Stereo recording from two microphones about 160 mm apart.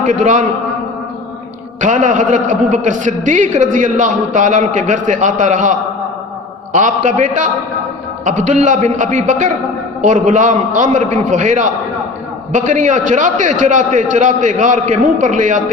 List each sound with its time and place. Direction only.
0.0 s a man's voice: 50° right (ahead or behind)
1.8 s a man's voice: 55° right (ahead or behind)
6.7 s a man's voice: 50° right (ahead or behind)